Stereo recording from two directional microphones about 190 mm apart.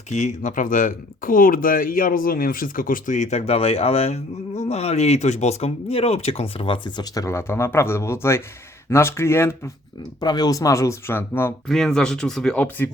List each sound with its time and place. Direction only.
0.1 s speech: 35° left (ahead or behind); by 12.9 s 10° left (ahead or behind)